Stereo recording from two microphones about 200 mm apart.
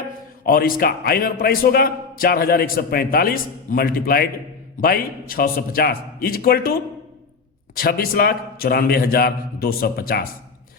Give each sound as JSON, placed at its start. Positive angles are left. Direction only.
{"t": 0.4, "sound": "a man's voice", "side_deg": 45}
{"t": 7.8, "sound": "a man's voice", "side_deg": 50}